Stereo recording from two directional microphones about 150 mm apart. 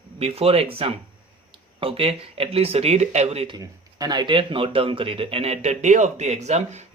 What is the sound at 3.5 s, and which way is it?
Speech, 25° right (ahead or behind).